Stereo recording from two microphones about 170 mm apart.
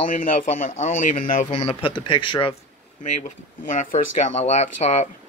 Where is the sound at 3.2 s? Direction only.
50° left (ahead or behind).